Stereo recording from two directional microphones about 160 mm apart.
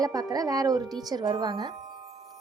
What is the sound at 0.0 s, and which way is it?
Speech, 25° right (ahead or behind).